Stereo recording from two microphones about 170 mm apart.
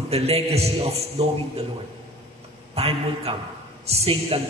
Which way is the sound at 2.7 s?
35° right (ahead or behind).